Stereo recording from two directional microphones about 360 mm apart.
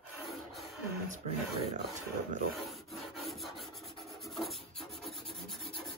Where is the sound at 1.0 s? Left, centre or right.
Centre.